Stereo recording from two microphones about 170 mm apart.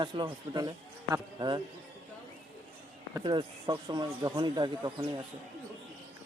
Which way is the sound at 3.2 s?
30° right (ahead or behind).